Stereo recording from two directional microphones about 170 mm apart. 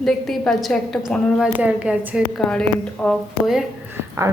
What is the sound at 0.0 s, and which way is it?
A woman's voice, centre (ahead or behind).